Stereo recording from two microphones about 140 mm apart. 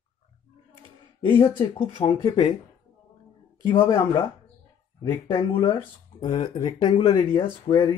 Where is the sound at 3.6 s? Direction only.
25° left (ahead or behind).